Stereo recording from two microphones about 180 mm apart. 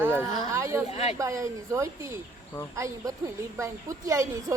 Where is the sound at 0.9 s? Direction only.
35° left (ahead or behind).